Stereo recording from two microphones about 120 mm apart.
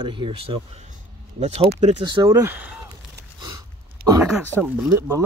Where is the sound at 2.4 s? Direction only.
15° right (ahead or behind).